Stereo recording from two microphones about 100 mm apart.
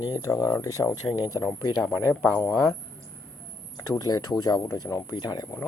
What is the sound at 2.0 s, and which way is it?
Speech, 25° left (ahead or behind).